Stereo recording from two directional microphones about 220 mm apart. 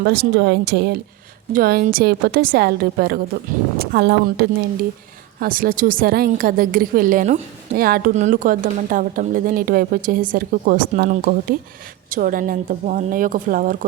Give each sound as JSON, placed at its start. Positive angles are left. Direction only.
{"t": 0.0, "sound": "a woman's voice", "side_deg": -50}